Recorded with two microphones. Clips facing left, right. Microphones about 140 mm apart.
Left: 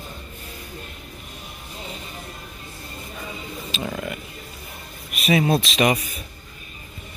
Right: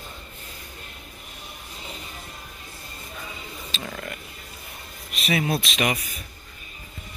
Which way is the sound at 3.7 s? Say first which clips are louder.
Left 6 dB; 10° left (ahead or behind).